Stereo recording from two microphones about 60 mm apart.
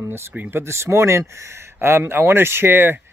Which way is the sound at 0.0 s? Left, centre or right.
Right.